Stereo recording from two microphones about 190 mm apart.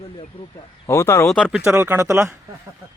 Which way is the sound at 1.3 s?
5° left (ahead or behind).